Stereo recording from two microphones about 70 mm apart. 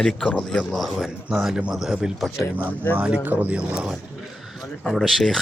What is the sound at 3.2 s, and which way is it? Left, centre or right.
Speech, right.